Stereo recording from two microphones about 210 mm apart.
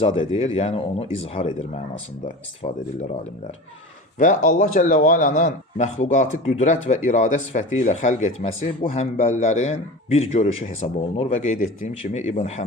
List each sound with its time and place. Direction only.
0.2 s speech: 30° left (ahead or behind)
2.6 s speech: 30° left (ahead or behind)
4.2 s speech: 40° left (ahead or behind)